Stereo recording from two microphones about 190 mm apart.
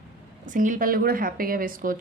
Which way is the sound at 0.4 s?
40° right (ahead or behind).